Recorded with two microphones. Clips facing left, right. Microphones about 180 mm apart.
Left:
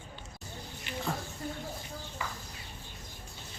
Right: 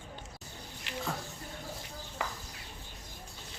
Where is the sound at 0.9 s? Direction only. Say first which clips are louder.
Left 1 dB; 90° right.